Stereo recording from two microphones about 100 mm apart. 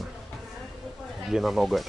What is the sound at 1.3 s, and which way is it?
Speech, centre (ahead or behind).